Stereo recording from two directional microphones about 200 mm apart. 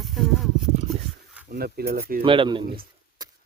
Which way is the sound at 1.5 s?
50° right (ahead or behind).